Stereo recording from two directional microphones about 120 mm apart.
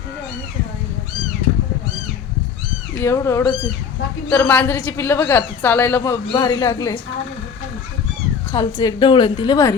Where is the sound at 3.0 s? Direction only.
25° left (ahead or behind).